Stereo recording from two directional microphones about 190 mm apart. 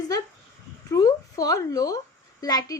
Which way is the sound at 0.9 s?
20° left (ahead or behind).